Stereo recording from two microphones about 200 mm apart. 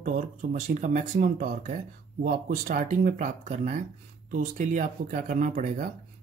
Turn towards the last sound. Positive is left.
turn(degrees=-40)  # may be behind; listen again after turning